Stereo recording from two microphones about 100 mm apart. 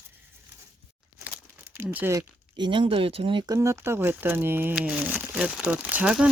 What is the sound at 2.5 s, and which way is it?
Speech, 50° right (ahead or behind).